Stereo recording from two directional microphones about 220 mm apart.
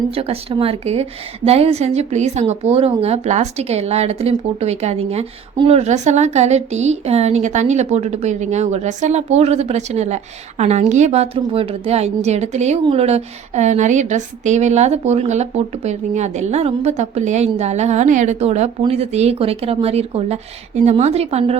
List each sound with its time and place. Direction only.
0.1 s a woman's voice: 25° right (ahead or behind)